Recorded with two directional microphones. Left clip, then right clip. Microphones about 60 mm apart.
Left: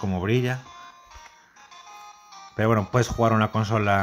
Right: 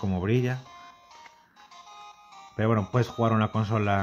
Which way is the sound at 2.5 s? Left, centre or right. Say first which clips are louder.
Left 4 dB; left.